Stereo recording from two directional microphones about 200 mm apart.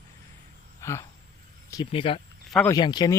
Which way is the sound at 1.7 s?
25° left (ahead or behind).